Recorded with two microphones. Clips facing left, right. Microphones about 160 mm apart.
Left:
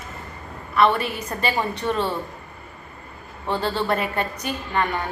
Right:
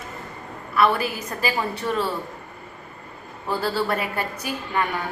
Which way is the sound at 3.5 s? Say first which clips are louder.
Left 1 dB; 5° right (ahead or behind).